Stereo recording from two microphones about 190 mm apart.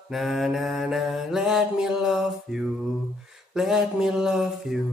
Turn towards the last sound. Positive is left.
turn(degrees=-5)  # may be behind; listen again after turning